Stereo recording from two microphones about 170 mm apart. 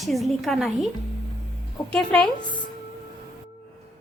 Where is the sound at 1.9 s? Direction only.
5° left (ahead or behind).